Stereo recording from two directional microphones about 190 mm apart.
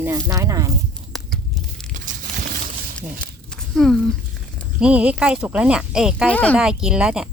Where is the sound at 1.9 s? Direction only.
50° right (ahead or behind).